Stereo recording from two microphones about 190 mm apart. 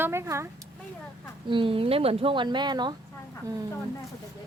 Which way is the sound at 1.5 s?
25° right (ahead or behind).